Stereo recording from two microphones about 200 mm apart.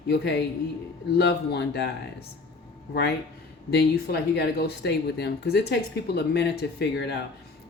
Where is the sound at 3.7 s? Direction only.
55° left (ahead or behind).